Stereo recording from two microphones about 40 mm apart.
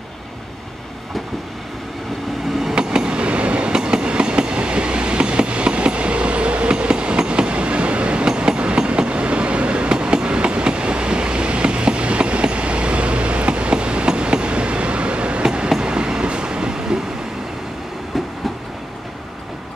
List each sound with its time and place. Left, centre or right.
2.7 s train: right